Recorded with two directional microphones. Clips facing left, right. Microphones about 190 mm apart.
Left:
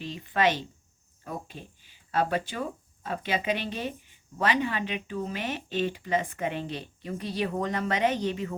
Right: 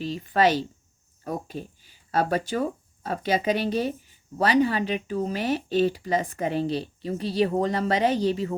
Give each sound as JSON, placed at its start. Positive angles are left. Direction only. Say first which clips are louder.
{"t": 0.0, "sound": "speech", "louder": "right 4 dB", "side_deg": -40}